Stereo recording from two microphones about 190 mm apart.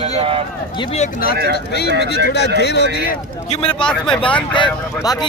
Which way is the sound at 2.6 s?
60° left (ahead or behind).